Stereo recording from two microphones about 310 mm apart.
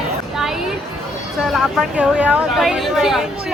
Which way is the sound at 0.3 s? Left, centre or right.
Centre.